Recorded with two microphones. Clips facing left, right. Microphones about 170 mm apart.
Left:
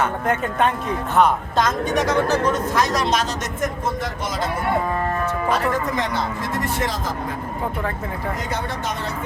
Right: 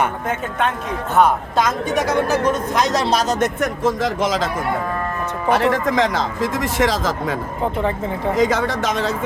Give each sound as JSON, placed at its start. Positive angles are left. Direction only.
{"t": 1.2, "sound": "a woman's voice", "side_deg": -5}
{"t": 3.4, "sound": "speech", "side_deg": -80}
{"t": 5.5, "sound": "speech", "side_deg": -75}
{"t": 8.4, "sound": "speech", "side_deg": -90}